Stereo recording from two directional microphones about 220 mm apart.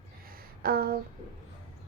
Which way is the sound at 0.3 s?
45° right (ahead or behind).